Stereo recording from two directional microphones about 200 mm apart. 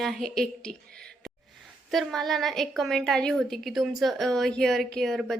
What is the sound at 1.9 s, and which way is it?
A woman's voice, centre (ahead or behind).